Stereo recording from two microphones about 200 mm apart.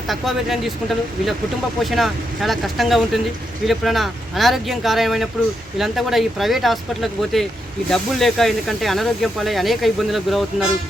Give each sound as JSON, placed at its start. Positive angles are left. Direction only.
{"t": 0.1, "sound": "speech", "side_deg": 0}
{"t": 1.8, "sound": "speech", "side_deg": 0}